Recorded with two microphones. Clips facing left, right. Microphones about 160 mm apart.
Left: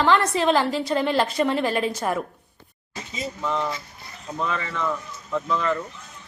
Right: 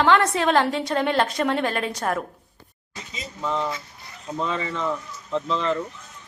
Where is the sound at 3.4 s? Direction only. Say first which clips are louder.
Right 1 dB; centre (ahead or behind).